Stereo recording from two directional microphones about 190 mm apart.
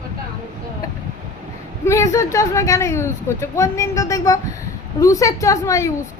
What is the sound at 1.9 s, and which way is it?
Speech, 15° left (ahead or behind).